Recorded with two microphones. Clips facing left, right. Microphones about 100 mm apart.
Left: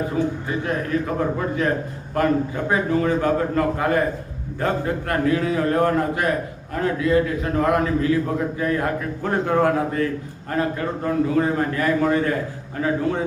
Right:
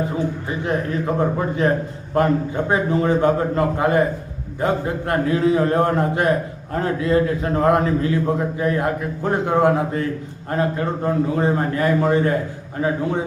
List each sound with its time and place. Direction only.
0.1 s a man's voice: 20° right (ahead or behind)